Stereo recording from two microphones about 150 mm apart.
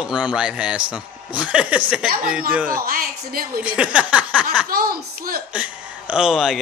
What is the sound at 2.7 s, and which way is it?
Speech, 75° right (ahead or behind).